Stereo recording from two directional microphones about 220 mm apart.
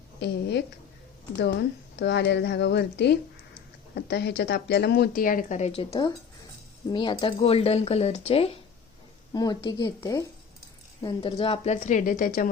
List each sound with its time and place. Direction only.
0.2 s speech: 50° left (ahead or behind)
2.0 s a woman's voice: 50° left (ahead or behind)